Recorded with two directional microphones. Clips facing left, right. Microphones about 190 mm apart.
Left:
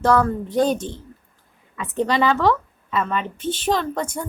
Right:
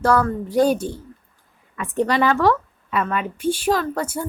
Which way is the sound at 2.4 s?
10° right (ahead or behind).